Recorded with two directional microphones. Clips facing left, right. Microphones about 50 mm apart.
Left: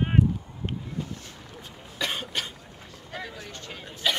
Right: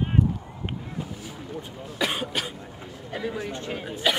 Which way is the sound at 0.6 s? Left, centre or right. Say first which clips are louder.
Even; centre.